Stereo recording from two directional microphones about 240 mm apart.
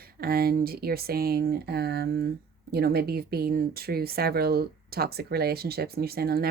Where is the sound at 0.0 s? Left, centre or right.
Right.